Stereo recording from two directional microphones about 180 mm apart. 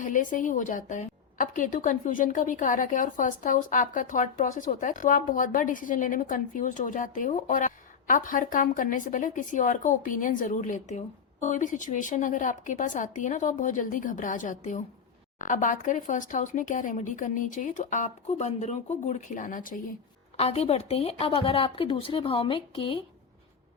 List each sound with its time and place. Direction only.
0.0 s a woman's voice: 45° left (ahead or behind)
20.3 s a woman's voice: 35° left (ahead or behind)